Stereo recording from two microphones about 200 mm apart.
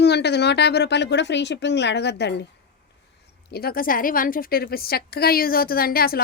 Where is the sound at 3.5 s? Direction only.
45° left (ahead or behind).